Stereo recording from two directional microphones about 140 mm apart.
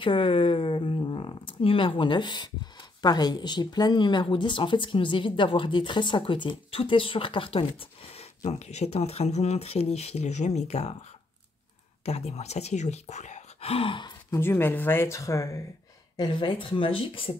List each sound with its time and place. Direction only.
0.0 s speech: 40° left (ahead or behind)
8.2 s speech: 50° left (ahead or behind)
12.0 s speech: 50° left (ahead or behind)
14.3 s speech: 15° left (ahead or behind)
16.2 s speech: 35° left (ahead or behind)